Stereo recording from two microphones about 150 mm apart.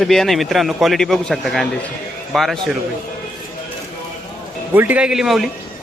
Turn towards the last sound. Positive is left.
turn(degrees=0)  # may be behind; listen again after turning